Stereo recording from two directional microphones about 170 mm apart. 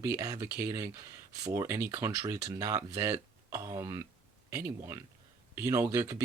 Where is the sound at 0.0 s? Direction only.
20° right (ahead or behind).